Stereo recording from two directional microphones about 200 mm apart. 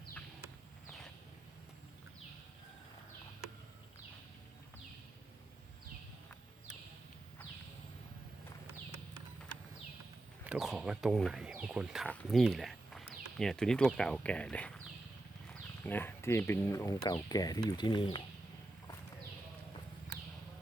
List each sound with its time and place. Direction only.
10.4 s speech: 5° right (ahead or behind)
15.9 s speech: 10° left (ahead or behind)